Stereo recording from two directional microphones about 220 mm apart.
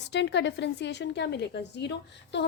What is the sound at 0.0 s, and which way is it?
A woman's voice, 50° left (ahead or behind).